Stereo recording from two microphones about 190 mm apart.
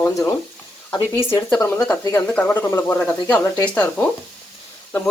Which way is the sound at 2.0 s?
10° left (ahead or behind).